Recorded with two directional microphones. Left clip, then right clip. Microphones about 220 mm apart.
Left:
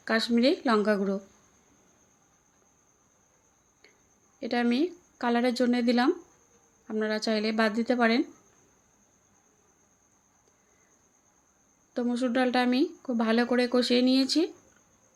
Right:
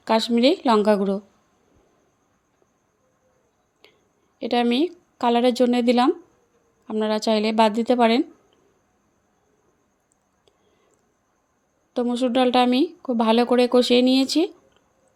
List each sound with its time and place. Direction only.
0.0 s speech: 30° right (ahead or behind)
4.4 s speech: 30° right (ahead or behind)
11.9 s speech: 30° right (ahead or behind)